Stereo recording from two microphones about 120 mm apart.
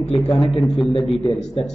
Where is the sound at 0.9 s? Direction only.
50° left (ahead or behind).